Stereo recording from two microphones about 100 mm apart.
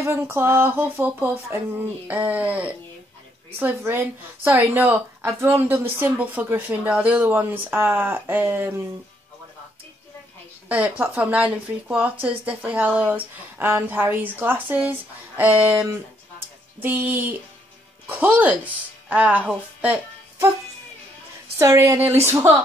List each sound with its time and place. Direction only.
0.0 s a woman's voice: 25° right (ahead or behind)
10.7 s a woman's voice: 15° right (ahead or behind)
15.9 s a sound: 20° right (ahead or behind)
18.0 s a woman's voice: 15° right (ahead or behind)
21.5 s speech: 30° right (ahead or behind)